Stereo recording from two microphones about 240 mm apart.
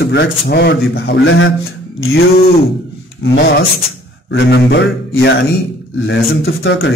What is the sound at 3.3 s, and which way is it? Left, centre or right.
A man's voice, left.